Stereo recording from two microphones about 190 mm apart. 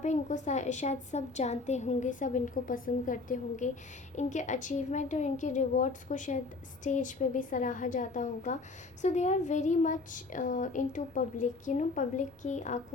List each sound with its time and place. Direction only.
0.0 s a woman's voice: 40° left (ahead or behind)